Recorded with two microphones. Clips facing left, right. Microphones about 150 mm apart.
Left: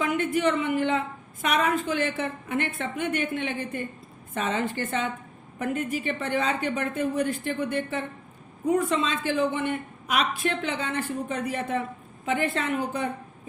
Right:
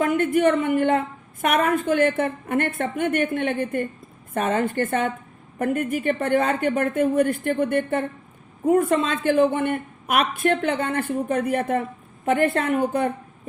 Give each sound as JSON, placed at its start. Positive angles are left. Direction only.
{"t": 0.0, "sound": "a woman's voice", "side_deg": -50}